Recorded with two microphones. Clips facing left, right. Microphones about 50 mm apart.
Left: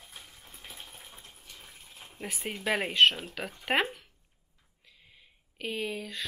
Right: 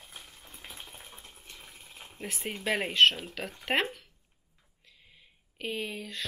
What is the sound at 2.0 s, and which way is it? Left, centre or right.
Speech, centre.